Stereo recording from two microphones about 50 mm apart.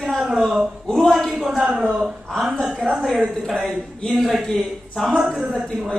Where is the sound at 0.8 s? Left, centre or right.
Centre.